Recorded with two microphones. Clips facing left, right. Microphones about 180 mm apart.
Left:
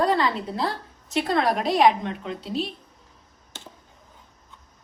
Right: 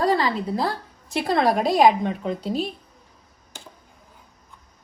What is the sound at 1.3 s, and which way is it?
A woman's voice, 40° right (ahead or behind).